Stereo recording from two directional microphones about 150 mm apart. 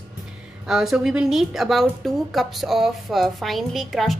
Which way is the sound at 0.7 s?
5° right (ahead or behind).